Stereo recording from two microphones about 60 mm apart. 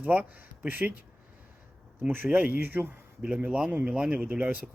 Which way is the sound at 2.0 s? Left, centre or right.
Right.